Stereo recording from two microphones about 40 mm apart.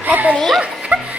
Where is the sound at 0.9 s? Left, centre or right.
Right.